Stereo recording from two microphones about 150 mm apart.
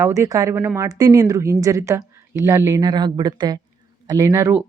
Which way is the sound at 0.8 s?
25° right (ahead or behind).